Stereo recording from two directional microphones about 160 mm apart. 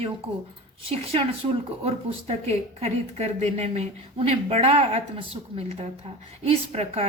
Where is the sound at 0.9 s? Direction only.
35° right (ahead or behind).